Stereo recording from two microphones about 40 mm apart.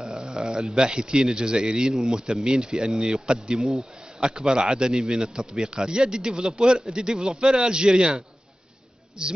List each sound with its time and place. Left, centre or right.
0.0 s speech: right